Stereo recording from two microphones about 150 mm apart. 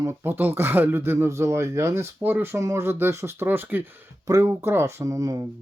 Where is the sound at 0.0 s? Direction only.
15° right (ahead or behind).